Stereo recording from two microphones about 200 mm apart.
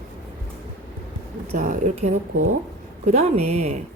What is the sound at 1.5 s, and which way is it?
Speech, 40° right (ahead or behind).